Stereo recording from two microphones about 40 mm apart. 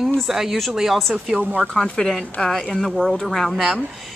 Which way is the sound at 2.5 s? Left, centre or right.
Centre.